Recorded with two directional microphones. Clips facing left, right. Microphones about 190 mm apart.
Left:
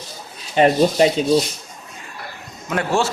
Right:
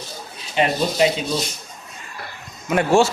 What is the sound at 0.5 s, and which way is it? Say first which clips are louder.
Speech: left 6 dB; 40° left (ahead or behind).